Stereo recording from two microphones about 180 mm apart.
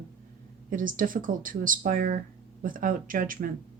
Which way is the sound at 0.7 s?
50° right (ahead or behind).